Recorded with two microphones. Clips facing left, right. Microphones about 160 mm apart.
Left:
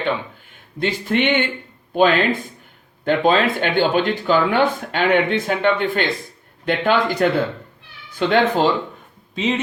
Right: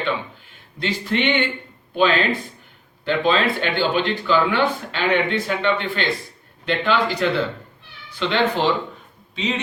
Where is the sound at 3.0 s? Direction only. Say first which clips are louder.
Left 3 dB; 45° left (ahead or behind).